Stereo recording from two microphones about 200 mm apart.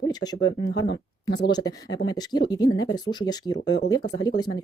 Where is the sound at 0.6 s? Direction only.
60° left (ahead or behind).